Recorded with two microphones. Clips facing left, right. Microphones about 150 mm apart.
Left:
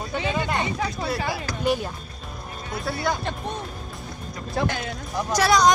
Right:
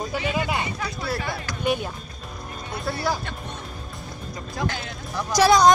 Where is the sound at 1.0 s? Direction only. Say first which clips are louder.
Left 2 dB; centre (ahead or behind).